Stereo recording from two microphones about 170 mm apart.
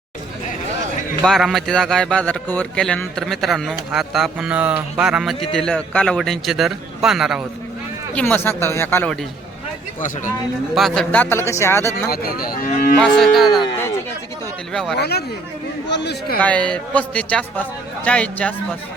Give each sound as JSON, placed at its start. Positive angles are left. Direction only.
{"t": 1.2, "sound": "a man's voice", "side_deg": 0}
{"t": 8.1, "sound": "a man's voice", "side_deg": 10}
{"t": 10.8, "sound": "a man's voice", "side_deg": 0}
{"t": 12.1, "sound": "cattle", "side_deg": 60}
{"t": 13.0, "sound": "a man's voice", "side_deg": 0}
{"t": 13.5, "sound": "speech", "side_deg": 25}
{"t": 14.7, "sound": "a man's voice", "side_deg": 5}
{"t": 14.9, "sound": "speech", "side_deg": 70}
{"t": 15.9, "sound": "a man's voice", "side_deg": 85}
{"t": 16.4, "sound": "a man's voice", "side_deg": 5}